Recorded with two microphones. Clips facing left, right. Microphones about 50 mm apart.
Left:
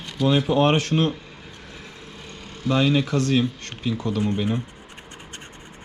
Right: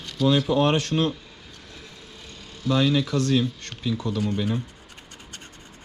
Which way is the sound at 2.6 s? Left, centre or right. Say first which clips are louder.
Left 1 dB; left.